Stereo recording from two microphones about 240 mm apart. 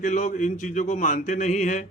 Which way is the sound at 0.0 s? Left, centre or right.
Left.